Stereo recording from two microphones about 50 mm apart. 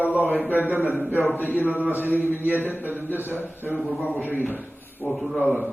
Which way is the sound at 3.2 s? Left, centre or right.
Left.